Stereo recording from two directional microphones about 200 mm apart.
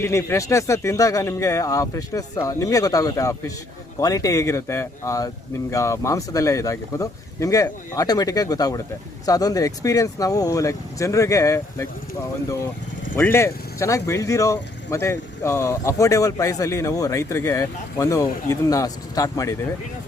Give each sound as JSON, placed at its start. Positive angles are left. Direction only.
{"t": 0.0, "sound": "speech", "side_deg": 15}
{"t": 13.1, "sound": "speech", "side_deg": 10}